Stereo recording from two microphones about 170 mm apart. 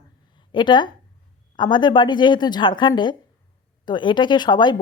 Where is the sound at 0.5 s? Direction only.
25° left (ahead or behind).